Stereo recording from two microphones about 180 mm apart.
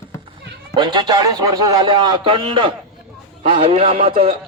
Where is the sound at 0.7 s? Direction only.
25° right (ahead or behind).